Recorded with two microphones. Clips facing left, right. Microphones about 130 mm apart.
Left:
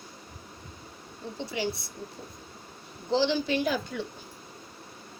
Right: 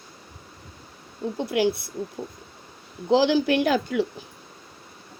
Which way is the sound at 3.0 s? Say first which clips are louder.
Right 7 dB; 85° right.